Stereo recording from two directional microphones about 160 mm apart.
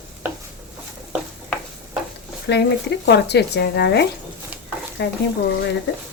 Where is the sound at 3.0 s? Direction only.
90° left.